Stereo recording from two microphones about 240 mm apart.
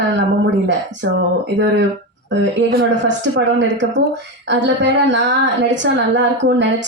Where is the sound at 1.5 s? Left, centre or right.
Right.